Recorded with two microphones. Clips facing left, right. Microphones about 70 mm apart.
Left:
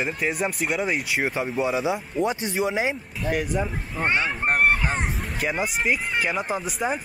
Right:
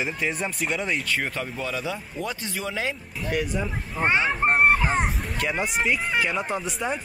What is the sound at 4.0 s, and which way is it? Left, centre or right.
Speech, centre.